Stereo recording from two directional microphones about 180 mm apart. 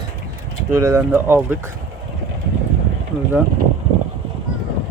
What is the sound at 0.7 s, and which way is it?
Speech, 15° right (ahead or behind).